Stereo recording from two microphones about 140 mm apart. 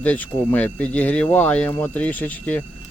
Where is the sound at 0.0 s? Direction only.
10° left (ahead or behind).